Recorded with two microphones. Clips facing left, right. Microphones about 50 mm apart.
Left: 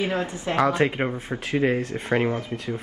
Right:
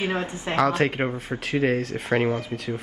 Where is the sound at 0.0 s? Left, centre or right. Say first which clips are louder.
Left 1 dB; right.